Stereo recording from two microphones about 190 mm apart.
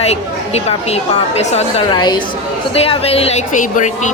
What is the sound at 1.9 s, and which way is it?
A woman's voice, 20° left (ahead or behind).